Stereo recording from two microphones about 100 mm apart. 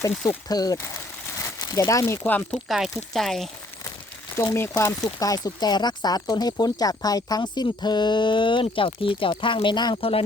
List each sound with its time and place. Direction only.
0.4 s speech: 40° left (ahead or behind)
1.9 s speech: 30° left (ahead or behind)
2.2 s speech: 15° left (ahead or behind)
2.6 s speech: centre (ahead or behind)
4.4 s speech: 25° left (ahead or behind); by 10.0 s 50° left (ahead or behind)
10.0 s speech: 70° left (ahead or behind)